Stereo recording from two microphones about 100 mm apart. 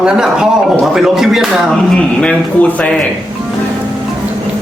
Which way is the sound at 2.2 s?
10° left (ahead or behind).